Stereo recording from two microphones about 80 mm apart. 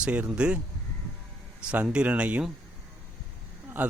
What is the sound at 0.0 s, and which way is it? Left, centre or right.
Speech, centre.